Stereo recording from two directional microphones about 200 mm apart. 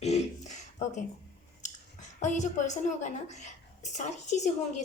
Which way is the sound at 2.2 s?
35° left (ahead or behind).